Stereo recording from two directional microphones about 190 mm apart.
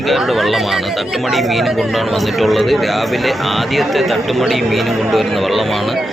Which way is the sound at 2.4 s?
Centre (ahead or behind).